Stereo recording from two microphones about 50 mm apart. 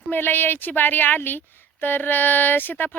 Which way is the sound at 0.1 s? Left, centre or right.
Left.